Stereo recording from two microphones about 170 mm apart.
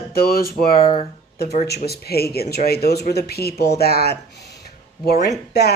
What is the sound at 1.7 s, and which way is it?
Speech, 70° left (ahead or behind).